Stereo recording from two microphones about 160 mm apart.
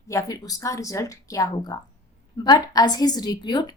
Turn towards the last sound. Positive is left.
turn(degrees=25)  # may be behind; listen again after turning